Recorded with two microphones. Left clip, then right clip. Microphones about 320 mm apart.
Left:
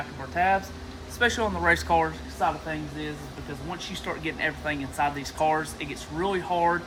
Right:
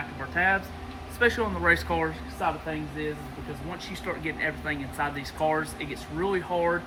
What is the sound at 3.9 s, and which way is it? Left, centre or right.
Speech, centre.